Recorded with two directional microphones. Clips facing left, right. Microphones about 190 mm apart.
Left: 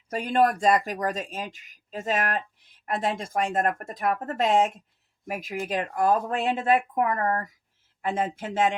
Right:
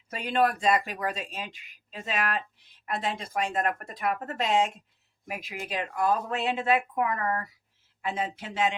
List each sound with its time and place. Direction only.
0.1 s speech: 45° left (ahead or behind)